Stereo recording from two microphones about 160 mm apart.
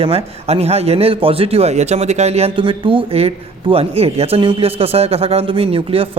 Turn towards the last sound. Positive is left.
turn(degrees=-35)  # may be behind; listen again after turning